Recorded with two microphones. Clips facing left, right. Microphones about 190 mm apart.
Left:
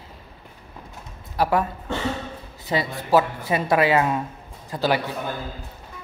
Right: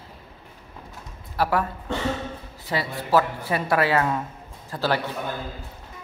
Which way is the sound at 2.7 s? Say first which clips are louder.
Left 2 dB; 20° left (ahead or behind).